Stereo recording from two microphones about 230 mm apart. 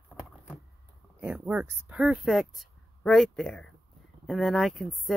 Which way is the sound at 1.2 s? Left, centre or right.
Centre.